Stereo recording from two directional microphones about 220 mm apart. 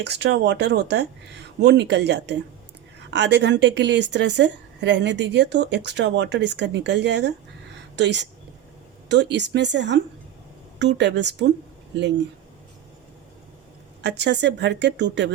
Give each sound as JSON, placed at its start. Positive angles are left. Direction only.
{"t": 0.0, "sound": "a woman's voice", "side_deg": -50}
{"t": 14.0, "sound": "a woman's voice", "side_deg": -50}